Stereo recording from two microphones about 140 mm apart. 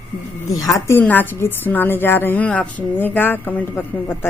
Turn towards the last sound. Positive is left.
turn(degrees=15)  # may be behind; listen again after turning